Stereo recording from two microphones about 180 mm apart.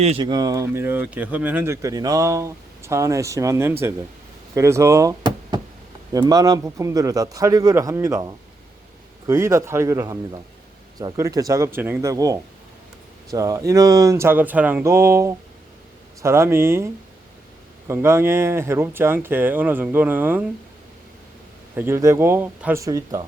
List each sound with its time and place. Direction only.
0.0 s a man's voice: 30° right (ahead or behind); by 20.4 s 10° right (ahead or behind)
21.8 s speech: 15° right (ahead or behind)